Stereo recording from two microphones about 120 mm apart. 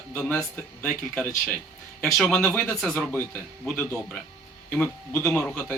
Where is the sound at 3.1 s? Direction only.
15° left (ahead or behind).